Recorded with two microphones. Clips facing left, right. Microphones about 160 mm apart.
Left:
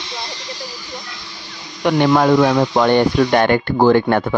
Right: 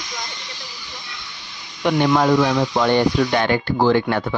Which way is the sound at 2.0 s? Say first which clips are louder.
Left 3 dB; 60° left (ahead or behind).